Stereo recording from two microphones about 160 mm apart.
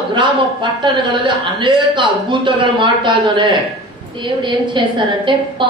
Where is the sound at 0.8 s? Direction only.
30° right (ahead or behind).